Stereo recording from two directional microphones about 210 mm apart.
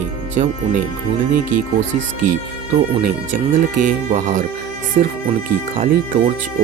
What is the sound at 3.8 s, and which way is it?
Speech, 35° right (ahead or behind).